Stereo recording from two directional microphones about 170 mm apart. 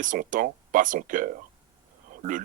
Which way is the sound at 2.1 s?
50° right (ahead or behind).